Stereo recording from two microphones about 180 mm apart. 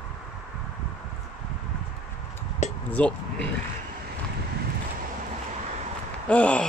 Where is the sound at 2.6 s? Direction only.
40° left (ahead or behind).